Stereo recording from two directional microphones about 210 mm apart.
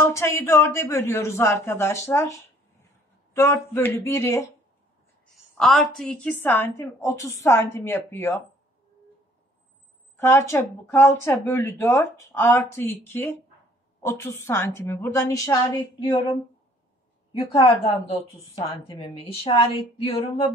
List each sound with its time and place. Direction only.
0.0 s speech: 10° left (ahead or behind)
5.6 s speech: centre (ahead or behind)
10.1 s speech: 15° left (ahead or behind)
17.3 s a woman's voice: 25° left (ahead or behind)